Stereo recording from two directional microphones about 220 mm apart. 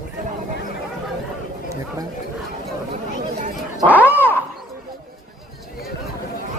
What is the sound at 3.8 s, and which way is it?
Speech, 20° right (ahead or behind).